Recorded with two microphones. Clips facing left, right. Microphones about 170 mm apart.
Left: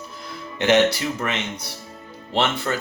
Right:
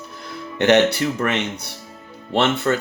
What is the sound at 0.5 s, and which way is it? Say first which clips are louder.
Speech: right 2 dB; 65° right (ahead or behind).